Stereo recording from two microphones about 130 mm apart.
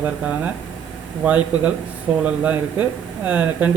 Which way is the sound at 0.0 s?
10° right (ahead or behind).